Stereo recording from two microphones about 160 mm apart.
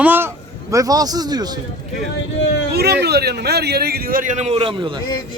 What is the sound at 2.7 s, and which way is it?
A man's voice, 90° right.